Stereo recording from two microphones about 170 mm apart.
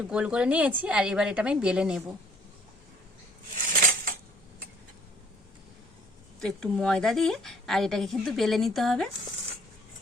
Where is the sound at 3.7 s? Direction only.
55° right (ahead or behind).